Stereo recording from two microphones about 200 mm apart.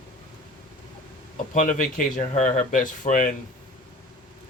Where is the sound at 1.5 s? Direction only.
40° left (ahead or behind).